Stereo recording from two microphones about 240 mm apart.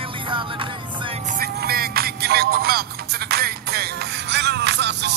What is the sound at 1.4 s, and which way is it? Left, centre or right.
Music, right.